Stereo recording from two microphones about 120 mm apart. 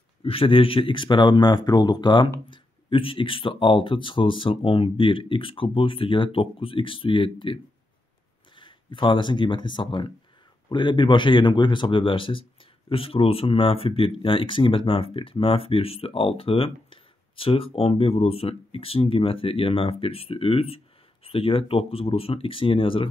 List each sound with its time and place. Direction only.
0.2 s a man's voice: 50° left (ahead or behind)